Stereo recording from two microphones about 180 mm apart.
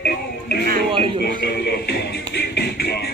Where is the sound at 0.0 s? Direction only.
60° left (ahead or behind).